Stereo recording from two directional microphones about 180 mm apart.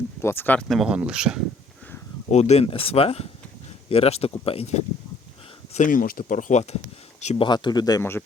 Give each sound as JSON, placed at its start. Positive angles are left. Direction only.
{"t": 0.2, "sound": "speech", "side_deg": 15}
{"t": 2.3, "sound": "speech", "side_deg": 35}
{"t": 5.7, "sound": "speech", "side_deg": 45}
{"t": 7.4, "sound": "speech", "side_deg": 25}